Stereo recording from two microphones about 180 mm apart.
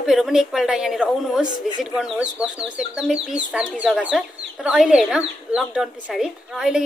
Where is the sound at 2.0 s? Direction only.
5° right (ahead or behind).